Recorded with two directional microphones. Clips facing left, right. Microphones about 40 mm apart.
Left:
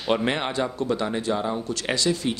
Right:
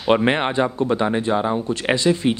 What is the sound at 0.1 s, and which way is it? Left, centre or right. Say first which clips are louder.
A man's voice: right 6 dB; right.